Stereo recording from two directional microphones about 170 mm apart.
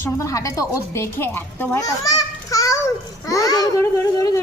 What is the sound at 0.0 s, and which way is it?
A woman's voice, 15° left (ahead or behind).